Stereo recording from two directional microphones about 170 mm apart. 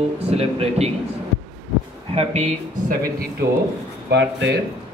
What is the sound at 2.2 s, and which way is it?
Speech, 40° right (ahead or behind).